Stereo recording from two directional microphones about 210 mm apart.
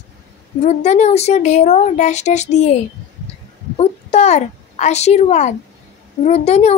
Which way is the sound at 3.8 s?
30° left (ahead or behind).